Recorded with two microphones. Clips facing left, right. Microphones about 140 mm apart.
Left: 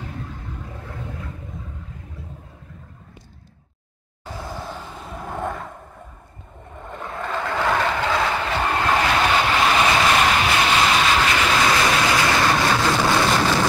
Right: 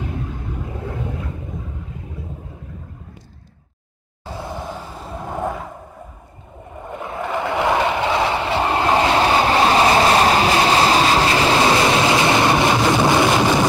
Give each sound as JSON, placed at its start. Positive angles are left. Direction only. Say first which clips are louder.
{"t": 0.0, "sound": "vehicle", "louder": "right 6 dB", "side_deg": -15}
{"t": 4.4, "sound": "vehicle", "louder": "right 3 dB", "side_deg": -20}
{"t": 4.7, "sound": "vehicle", "louder": "right 3 dB", "side_deg": -10}
{"t": 6.9, "sound": "vehicle", "louder": "right 4 dB", "side_deg": -5}